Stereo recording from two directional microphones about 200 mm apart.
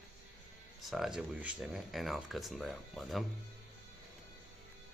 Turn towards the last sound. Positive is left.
turn(degrees=0)  # may be behind; listen again after turning